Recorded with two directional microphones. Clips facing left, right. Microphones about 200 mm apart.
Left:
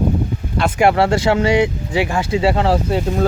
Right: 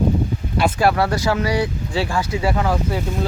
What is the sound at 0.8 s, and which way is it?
Speech, 25° left (ahead or behind).